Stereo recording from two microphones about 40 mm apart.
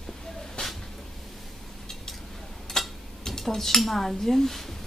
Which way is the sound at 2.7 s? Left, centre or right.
Centre.